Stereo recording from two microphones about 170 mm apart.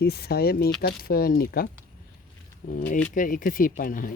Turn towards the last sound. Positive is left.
turn(degrees=55)  # may be behind; listen again after turning